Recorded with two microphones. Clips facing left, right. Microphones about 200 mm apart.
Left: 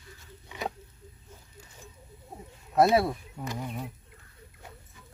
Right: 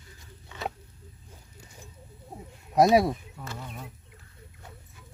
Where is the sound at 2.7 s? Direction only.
15° right (ahead or behind).